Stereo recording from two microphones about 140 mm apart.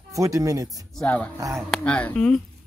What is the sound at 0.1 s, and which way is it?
Speech, 25° right (ahead or behind).